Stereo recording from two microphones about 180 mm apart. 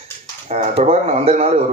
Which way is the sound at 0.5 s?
40° right (ahead or behind).